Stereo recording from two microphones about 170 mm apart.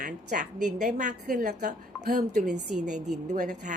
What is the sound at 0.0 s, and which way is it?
A woman's voice, 50° right (ahead or behind).